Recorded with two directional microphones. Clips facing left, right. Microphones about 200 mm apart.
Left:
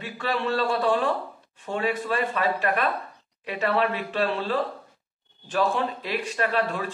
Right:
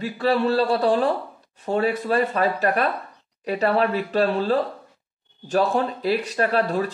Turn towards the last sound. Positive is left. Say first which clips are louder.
# right 4 dB
turn(degrees=-40)  # may be behind; listen again after turning